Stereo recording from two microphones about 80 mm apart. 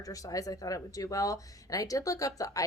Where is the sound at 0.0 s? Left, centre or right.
Left.